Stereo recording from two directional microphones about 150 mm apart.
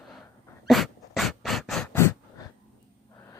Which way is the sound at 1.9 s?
20° left (ahead or behind).